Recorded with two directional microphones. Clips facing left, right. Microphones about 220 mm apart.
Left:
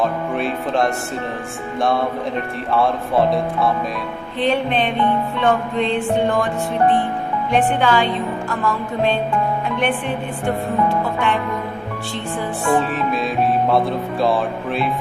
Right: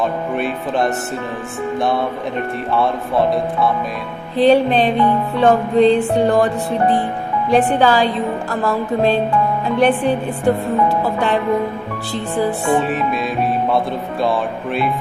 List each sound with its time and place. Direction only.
0.0 s speech: centre (ahead or behind)
2.7 s speech: centre (ahead or behind)
4.4 s music: 35° right (ahead or behind)
7.5 s music: 35° right (ahead or behind)
12.6 s speech: centre (ahead or behind)